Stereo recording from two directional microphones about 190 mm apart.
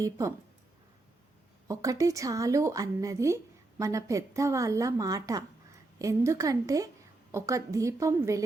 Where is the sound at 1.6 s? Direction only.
15° right (ahead or behind).